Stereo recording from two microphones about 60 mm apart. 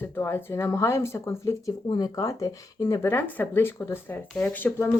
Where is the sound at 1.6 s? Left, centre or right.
Left.